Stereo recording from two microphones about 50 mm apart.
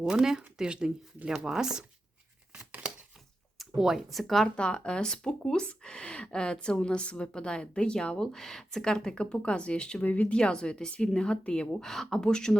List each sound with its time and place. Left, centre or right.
0.0 s speech: centre
3.6 s speech: centre
4.4 s speech: left
10.0 s speech: left
10.3 s speech: centre